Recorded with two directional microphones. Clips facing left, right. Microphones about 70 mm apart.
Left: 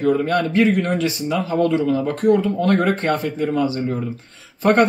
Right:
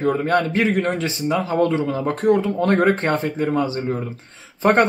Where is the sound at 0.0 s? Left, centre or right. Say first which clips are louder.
Left 1 dB; right.